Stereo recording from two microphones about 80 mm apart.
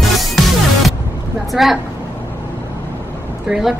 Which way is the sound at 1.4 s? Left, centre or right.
Centre.